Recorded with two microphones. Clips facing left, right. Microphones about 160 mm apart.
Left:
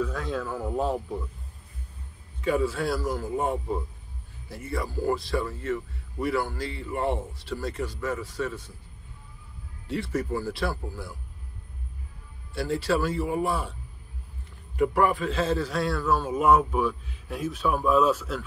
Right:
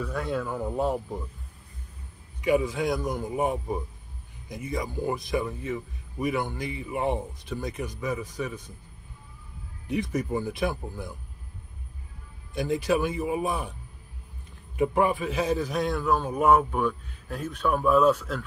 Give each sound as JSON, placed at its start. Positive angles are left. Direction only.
{"t": 0.0, "sound": "a man's voice", "side_deg": -10}
{"t": 2.4, "sound": "a man's voice", "side_deg": -15}
{"t": 9.8, "sound": "a man's voice", "side_deg": -15}
{"t": 12.5, "sound": "a man's voice", "side_deg": -15}
{"t": 14.8, "sound": "a man's voice", "side_deg": -15}
{"t": 16.1, "sound": "a man's voice", "side_deg": 5}